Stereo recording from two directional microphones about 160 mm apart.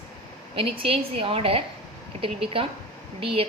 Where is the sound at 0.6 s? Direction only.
35° right (ahead or behind).